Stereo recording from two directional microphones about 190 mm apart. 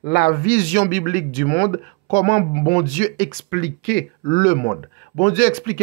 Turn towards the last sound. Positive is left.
turn(degrees=45)  # may be behind; listen again after turning